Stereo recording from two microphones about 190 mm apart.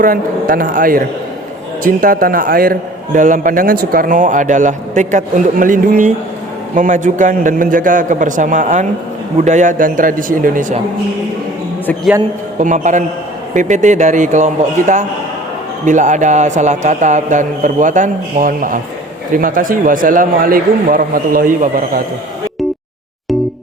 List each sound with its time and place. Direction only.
0.0 s a man's voice: 50° right (ahead or behind)
12.5 s a man's voice: 40° right (ahead or behind)